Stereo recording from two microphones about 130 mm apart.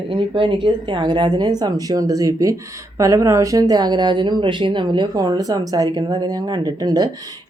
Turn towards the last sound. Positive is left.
turn(degrees=-30)  # may be behind; listen again after turning